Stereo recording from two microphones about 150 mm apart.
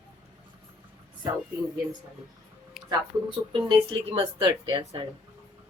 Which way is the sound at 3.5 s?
30° right (ahead or behind).